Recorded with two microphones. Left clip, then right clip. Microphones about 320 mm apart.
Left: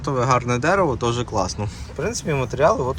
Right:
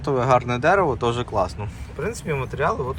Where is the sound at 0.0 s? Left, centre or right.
Centre.